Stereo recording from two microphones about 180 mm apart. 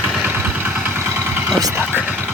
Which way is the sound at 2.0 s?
10° right (ahead or behind).